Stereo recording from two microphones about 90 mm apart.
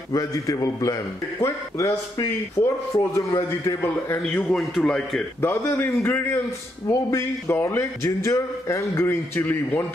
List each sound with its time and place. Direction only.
0.1 s a man's voice: 40° left (ahead or behind)
3.8 s a man's voice: 20° left (ahead or behind)
4.5 s a man's voice: 5° left (ahead or behind)
5.4 s a man's voice: 25° left (ahead or behind)